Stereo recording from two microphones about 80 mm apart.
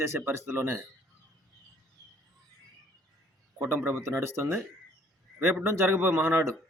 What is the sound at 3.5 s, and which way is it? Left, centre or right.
Speech, right.